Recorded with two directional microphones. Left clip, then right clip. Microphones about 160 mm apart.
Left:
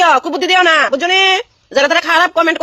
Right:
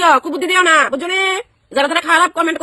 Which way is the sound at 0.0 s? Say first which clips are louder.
Left 2 dB; 15° right (ahead or behind).